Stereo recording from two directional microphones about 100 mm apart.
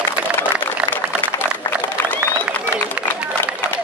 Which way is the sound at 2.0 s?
15° left (ahead or behind).